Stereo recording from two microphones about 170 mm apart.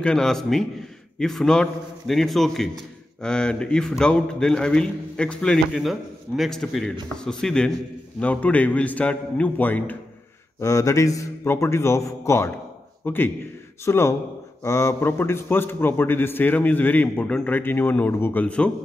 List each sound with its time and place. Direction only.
0.0 s a man's voice: 5° left (ahead or behind)